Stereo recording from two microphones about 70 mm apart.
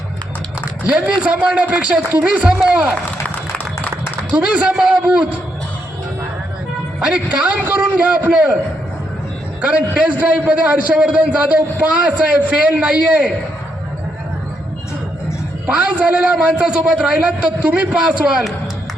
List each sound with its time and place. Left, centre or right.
0.9 s a man's voice: centre
3.2 s a sound: left
4.3 s a man's voice: centre
7.1 s a man's voice: centre
9.6 s a man's voice: centre
15.6 s a man's voice: centre